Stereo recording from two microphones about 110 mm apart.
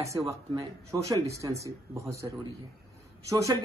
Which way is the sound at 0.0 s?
30° right (ahead or behind).